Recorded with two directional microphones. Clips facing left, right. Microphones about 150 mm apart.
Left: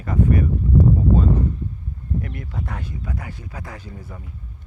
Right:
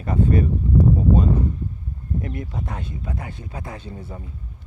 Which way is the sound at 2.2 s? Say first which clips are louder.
Right 2 dB; 25° right (ahead or behind).